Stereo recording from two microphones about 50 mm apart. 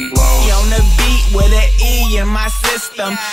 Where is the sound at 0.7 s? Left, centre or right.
Centre.